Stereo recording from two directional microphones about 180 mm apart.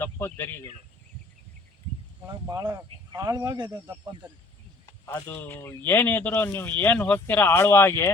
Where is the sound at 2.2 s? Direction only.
20° right (ahead or behind).